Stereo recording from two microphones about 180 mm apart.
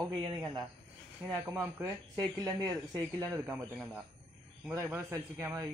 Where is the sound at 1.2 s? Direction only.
20° right (ahead or behind).